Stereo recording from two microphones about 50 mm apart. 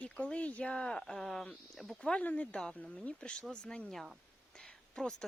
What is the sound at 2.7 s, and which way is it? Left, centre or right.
Speech, left.